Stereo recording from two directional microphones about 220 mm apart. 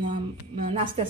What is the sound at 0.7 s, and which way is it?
Speech, 25° right (ahead or behind).